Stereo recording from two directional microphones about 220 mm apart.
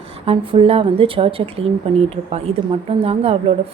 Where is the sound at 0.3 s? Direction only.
25° right (ahead or behind).